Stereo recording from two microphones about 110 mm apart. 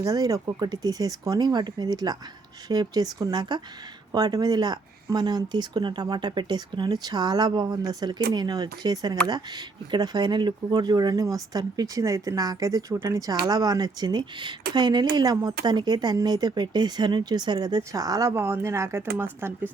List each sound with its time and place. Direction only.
0.0 s speech: 30° right (ahead or behind)
18.3 s speech: 20° right (ahead or behind)